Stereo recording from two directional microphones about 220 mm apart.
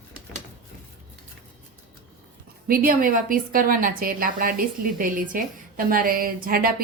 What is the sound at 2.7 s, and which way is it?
A woman's voice, 40° right (ahead or behind).